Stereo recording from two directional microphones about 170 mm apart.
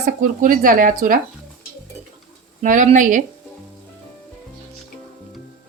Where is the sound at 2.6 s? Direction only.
45° right (ahead or behind).